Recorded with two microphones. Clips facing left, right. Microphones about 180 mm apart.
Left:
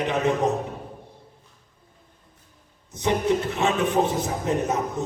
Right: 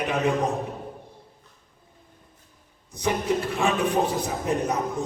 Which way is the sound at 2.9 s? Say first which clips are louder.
Left 2 dB; 20° left (ahead or behind).